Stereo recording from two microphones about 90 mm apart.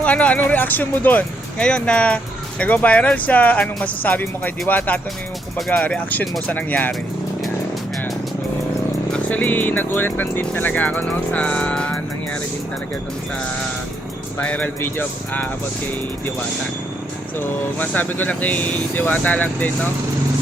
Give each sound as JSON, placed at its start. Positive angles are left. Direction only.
{"t": 0.0, "sound": "speech", "side_deg": 15}
{"t": 5.5, "sound": "speech", "side_deg": 5}
{"t": 5.8, "sound": "speech", "side_deg": 15}
{"t": 9.1, "sound": "speech", "side_deg": 15}
{"t": 14.3, "sound": "speech", "side_deg": 15}
{"t": 17.3, "sound": "speech", "side_deg": 20}